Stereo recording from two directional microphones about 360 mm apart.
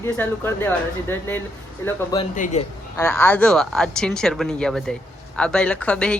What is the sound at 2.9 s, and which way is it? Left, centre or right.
A woman's voice, centre.